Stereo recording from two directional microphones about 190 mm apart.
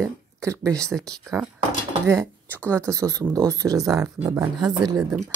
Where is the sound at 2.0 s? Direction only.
15° right (ahead or behind).